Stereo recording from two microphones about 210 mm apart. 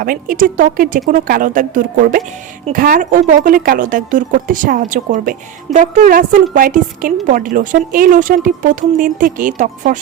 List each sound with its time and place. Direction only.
0.0 s speech: 40° right (ahead or behind)